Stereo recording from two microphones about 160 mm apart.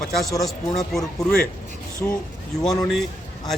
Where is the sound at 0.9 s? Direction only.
5° left (ahead or behind).